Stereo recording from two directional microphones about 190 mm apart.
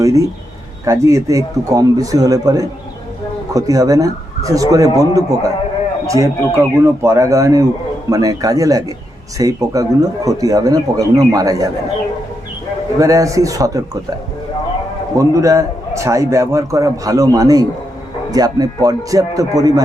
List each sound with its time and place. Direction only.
0.0 s a man's voice: 15° right (ahead or behind)
13.0 s a man's voice: 15° right (ahead or behind)
15.2 s a man's voice: 15° right (ahead or behind)